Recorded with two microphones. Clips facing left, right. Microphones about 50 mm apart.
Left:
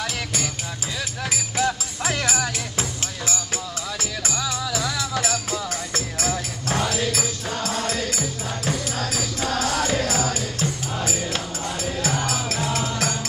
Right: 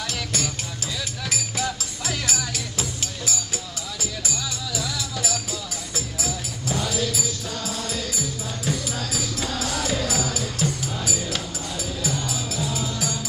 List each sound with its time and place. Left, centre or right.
0.0 s music: centre
1.6 s music: left
4.0 s music: left
6.8 s music: left
7.1 s music: left
12.0 s music: left